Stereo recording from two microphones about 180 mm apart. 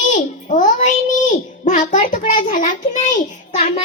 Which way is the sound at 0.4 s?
45° left (ahead or behind).